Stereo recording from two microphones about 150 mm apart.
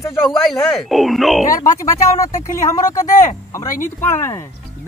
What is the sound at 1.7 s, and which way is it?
Speech, 20° left (ahead or behind).